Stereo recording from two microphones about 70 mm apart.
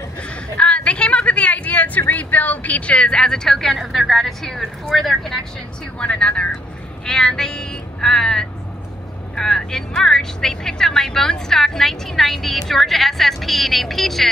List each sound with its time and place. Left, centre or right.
0.2 s a woman's voice: centre
5.9 s speech: centre